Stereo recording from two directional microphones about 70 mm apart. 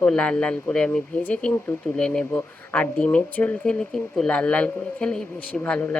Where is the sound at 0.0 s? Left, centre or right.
Centre.